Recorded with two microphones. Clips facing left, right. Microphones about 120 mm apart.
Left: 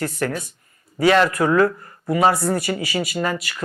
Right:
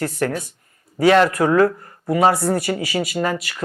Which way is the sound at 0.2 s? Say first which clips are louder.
Right 2 dB; 45° right (ahead or behind).